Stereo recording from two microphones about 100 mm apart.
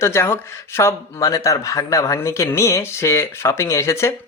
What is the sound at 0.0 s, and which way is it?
Speech, 25° left (ahead or behind).